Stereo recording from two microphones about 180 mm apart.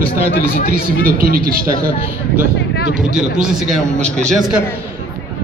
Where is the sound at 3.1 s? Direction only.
5° right (ahead or behind).